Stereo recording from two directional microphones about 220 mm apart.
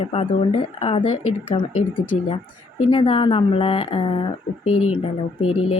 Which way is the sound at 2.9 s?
25° left (ahead or behind).